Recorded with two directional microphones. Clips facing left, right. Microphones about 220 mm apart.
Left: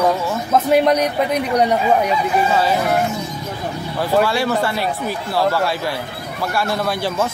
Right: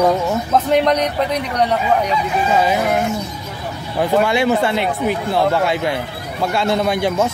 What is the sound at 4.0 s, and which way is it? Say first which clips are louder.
Speech: right 2 dB; 20° right (ahead or behind).